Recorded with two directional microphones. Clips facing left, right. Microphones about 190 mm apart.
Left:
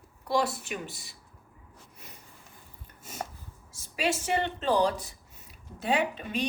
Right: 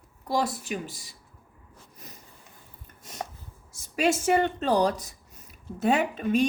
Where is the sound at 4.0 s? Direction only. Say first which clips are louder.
Right 6 dB; 45° right (ahead or behind).